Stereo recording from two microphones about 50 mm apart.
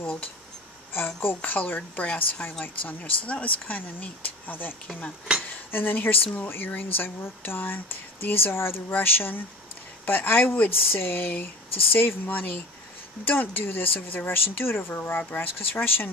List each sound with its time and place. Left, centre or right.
0.9 s speech: left
1.8 s a woman's voice: left
5.5 s dishes: left
5.9 s speech: left
6.5 s speech: left